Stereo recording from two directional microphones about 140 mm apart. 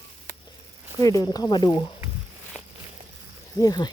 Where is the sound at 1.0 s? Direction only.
25° left (ahead or behind).